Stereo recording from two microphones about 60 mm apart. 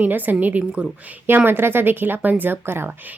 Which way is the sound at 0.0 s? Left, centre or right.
Right.